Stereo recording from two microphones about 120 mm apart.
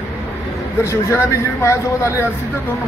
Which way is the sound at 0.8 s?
25° left (ahead or behind).